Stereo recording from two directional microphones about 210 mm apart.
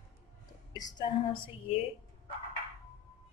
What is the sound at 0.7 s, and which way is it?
Speech, 15° left (ahead or behind).